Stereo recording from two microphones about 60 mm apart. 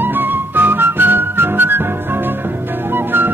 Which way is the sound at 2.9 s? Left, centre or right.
Right.